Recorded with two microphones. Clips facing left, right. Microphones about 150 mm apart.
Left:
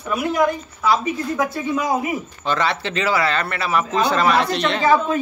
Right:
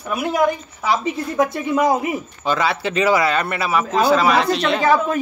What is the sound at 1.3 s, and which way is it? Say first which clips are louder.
A woman's voice: right 7 dB; 20° right (ahead or behind).